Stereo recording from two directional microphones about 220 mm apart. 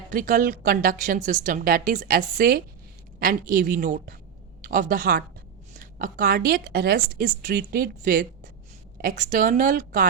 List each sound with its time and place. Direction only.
0.1 s a woman's voice: 40° right (ahead or behind)